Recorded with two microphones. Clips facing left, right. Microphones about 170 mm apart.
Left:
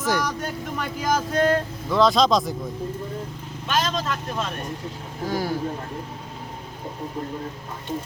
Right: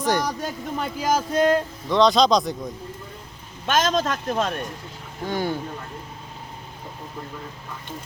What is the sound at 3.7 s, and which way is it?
Speech, 45° right (ahead or behind).